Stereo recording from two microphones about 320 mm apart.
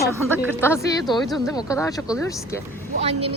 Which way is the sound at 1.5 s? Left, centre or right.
Centre.